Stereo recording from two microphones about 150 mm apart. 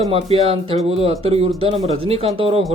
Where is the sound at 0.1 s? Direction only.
40° right (ahead or behind).